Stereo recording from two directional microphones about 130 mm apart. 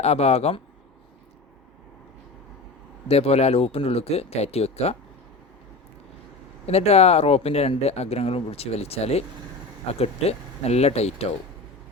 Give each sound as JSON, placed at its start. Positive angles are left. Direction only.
{"t": 0.0, "sound": "speech", "side_deg": 55}
{"t": 3.1, "sound": "speech", "side_deg": 50}
{"t": 6.7, "sound": "speech", "side_deg": 55}